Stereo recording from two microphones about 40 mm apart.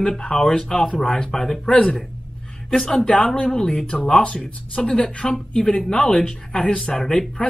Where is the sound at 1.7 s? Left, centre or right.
Left.